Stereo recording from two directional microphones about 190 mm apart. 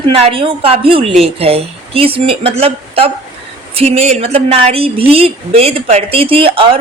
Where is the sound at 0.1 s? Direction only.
30° right (ahead or behind).